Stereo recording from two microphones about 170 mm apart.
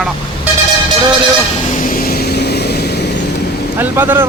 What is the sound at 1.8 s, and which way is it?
Vehicle, 55° left (ahead or behind).